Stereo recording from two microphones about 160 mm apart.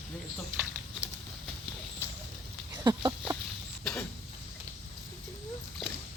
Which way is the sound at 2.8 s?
25° right (ahead or behind).